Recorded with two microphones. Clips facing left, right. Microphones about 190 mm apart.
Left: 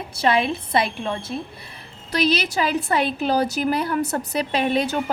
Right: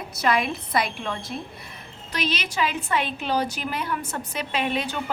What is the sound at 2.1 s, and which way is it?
A woman's voice, 40° left (ahead or behind).